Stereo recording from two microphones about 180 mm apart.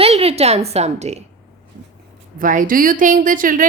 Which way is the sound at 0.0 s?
35° right (ahead or behind).